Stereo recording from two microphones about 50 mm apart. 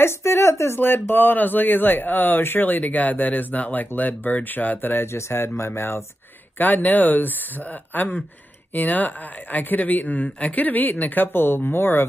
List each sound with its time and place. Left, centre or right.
0.0 s speech: left
0.7 s speech: left
4.9 s speech: left
6.6 s speech: left